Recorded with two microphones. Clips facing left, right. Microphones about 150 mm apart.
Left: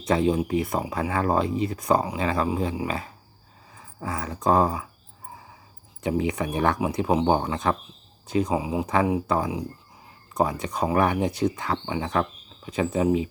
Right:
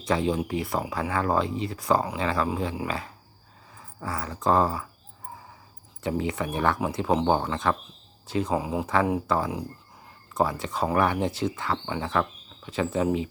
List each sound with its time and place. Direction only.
0.0 s speech: 25° left (ahead or behind)
6.0 s speech: 15° left (ahead or behind)